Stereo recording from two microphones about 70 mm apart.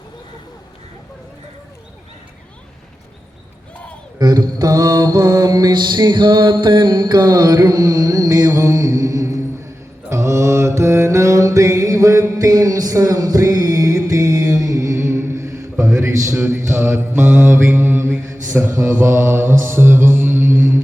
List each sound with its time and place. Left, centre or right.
4.2 s mantra: right
18.3 s mantra: right
18.7 s mantra: right